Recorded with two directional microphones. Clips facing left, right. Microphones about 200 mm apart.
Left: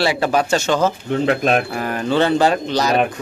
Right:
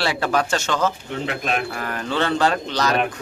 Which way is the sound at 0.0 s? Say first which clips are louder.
Left 4 dB; 10° left (ahead or behind).